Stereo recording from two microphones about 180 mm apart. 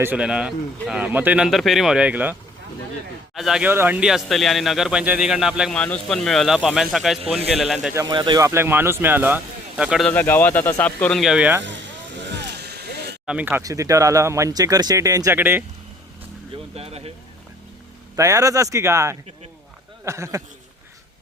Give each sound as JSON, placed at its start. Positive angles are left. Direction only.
{"t": 0.0, "sound": "speech", "side_deg": -5}
{"t": 3.3, "sound": "speech", "side_deg": 0}
{"t": 7.9, "sound": "speech", "side_deg": -25}
{"t": 10.1, "sound": "speech", "side_deg": 10}
{"t": 11.6, "sound": "vehicle", "side_deg": -85}
{"t": 13.2, "sound": "speech", "side_deg": -5}
{"t": 13.6, "sound": "speech", "side_deg": -20}
{"t": 16.7, "sound": "speech", "side_deg": -35}
{"t": 18.2, "sound": "speech", "side_deg": -15}